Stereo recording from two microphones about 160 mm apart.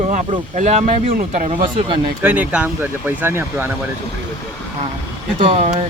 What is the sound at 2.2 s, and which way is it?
Speech, 10° right (ahead or behind).